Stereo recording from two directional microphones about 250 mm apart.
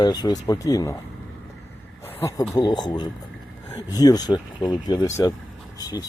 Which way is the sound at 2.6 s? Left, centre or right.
Centre.